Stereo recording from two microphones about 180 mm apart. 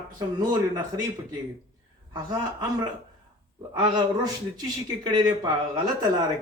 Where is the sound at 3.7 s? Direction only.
25° right (ahead or behind).